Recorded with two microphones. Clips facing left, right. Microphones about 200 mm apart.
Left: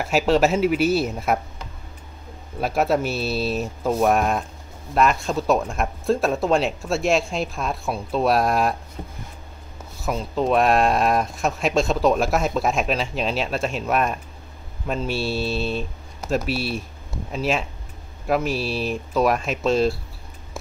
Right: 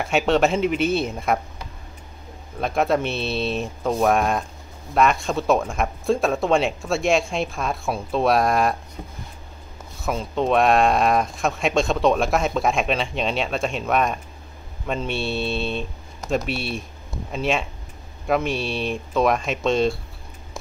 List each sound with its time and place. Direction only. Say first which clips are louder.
0.0 s speech: left 1 dB; centre (ahead or behind)
2.6 s speech: even; 5° left (ahead or behind)
10.0 s speech: even; centre (ahead or behind)